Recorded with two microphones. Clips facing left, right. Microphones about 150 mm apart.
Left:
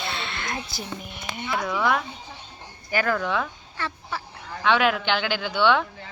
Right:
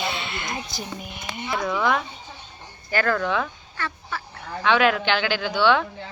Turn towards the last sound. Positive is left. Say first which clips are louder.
# right 1 dB
turn(degrees=10)  # may be behind; listen again after turning